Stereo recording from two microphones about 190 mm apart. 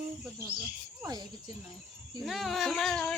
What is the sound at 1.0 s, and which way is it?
Speech, 20° right (ahead or behind).